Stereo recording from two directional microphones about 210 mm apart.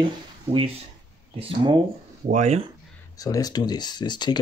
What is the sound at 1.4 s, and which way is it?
Speech, 20° right (ahead or behind).